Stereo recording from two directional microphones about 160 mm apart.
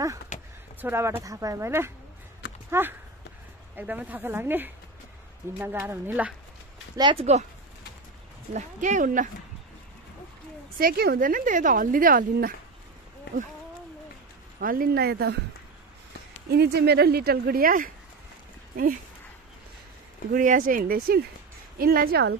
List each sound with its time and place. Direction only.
0.3 s a sound: 45° left (ahead or behind)
0.7 s speech: 15° right (ahead or behind)
7.0 s speech: 30° right (ahead or behind)
8.5 s speech: 50° right (ahead or behind)
10.8 s speech: 70° right (ahead or behind)
14.6 s speech: 65° right (ahead or behind); by 15.3 s 80° right
16.4 s speech: 90° right; by 17.9 s 60° right (ahead or behind)
20.3 s speech: 60° right (ahead or behind); by 22.4 s 85° right